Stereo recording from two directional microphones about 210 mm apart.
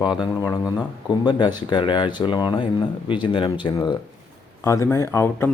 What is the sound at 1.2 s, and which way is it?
Speech, 20° left (ahead or behind).